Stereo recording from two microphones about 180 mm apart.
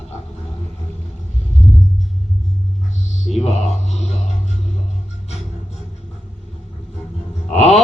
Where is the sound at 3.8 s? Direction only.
40° left (ahead or behind).